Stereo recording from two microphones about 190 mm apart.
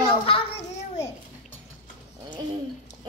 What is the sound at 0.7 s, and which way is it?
Babbling, 35° left (ahead or behind).